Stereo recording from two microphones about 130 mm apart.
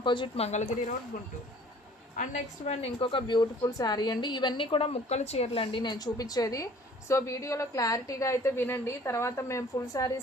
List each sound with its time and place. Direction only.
0.0 s speech: 40° left (ahead or behind)
0.3 s speech: 55° left (ahead or behind)
2.1 s a woman's voice: 60° left (ahead or behind); by 10.1 s 25° left (ahead or behind)